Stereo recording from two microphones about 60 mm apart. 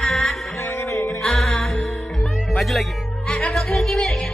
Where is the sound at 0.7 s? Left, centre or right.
Left.